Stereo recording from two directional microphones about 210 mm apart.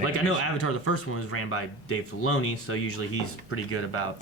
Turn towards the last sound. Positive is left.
turn(degrees=90)